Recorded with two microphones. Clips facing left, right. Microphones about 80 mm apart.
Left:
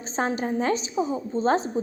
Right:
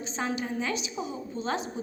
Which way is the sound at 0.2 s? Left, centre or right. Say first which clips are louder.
Left 6 dB; left.